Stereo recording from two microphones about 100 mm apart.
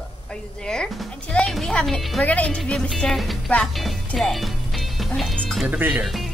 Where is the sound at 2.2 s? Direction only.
15° left (ahead or behind).